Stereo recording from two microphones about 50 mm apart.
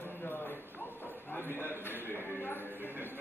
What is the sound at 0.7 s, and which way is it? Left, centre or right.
Clip-clop, left.